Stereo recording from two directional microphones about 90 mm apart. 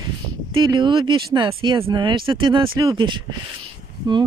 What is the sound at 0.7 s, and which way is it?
Speech, 60° right (ahead or behind).